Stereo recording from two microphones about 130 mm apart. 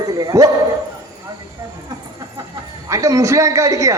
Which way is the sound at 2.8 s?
25° right (ahead or behind).